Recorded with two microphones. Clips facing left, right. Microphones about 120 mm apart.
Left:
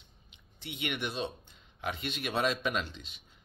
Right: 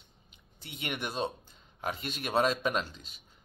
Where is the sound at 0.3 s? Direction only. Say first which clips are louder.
Left 4 dB; 40° right (ahead or behind).